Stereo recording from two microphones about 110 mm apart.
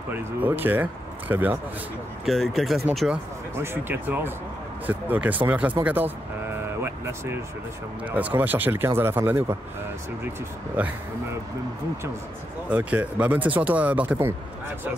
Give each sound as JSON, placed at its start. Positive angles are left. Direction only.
{"t": 0.4, "sound": "speech", "side_deg": -15}
{"t": 2.2, "sound": "speech", "side_deg": 0}
{"t": 3.5, "sound": "speech", "side_deg": -20}
{"t": 10.8, "sound": "speech", "side_deg": -15}
{"t": 12.6, "sound": "speech", "side_deg": -15}